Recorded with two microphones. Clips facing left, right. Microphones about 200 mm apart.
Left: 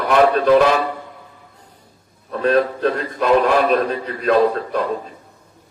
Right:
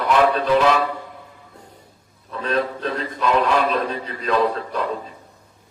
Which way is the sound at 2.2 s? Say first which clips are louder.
Left 6 dB; 55° left (ahead or behind).